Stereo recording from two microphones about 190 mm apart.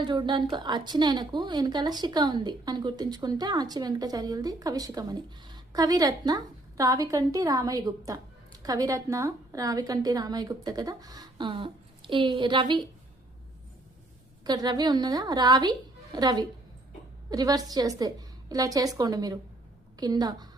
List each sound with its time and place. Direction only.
0.0 s a woman's voice: 25° right (ahead or behind)
14.4 s a woman's voice: 20° right (ahead or behind)